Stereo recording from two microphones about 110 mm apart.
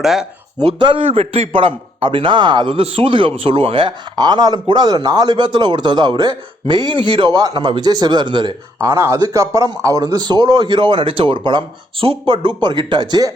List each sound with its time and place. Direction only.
0.0 s speech: 5° right (ahead or behind)
0.6 s a man's voice: 50° right (ahead or behind)
7.3 s a man's voice: 40° right (ahead or behind)